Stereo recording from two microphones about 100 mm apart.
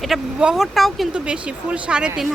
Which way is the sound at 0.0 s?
5° right (ahead or behind).